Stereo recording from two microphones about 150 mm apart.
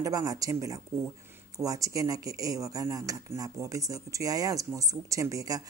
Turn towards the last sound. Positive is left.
turn(degrees=-25)  # may be behind; listen again after turning